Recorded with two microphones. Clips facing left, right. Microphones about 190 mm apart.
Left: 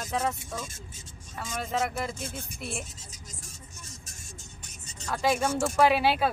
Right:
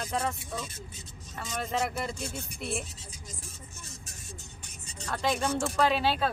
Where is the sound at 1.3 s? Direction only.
Centre (ahead or behind).